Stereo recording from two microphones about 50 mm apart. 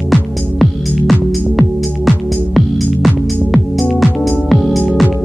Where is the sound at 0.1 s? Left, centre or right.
Centre.